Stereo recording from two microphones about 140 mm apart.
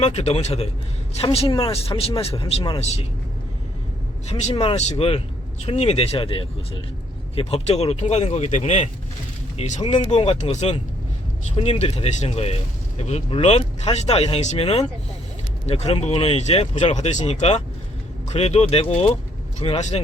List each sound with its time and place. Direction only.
0.0 s speech: 50° left (ahead or behind)
4.3 s speech: 50° left (ahead or behind)
9.8 s speech: 35° left (ahead or behind)
10.1 s speech: 45° left (ahead or behind)